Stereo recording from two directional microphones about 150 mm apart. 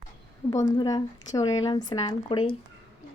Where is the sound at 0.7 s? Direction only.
25° left (ahead or behind).